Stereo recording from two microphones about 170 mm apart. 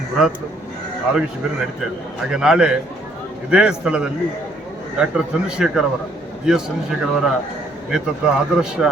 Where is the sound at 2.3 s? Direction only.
5° right (ahead or behind).